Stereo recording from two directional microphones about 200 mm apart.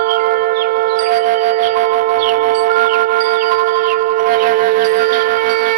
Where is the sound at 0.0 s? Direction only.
45° right (ahead or behind).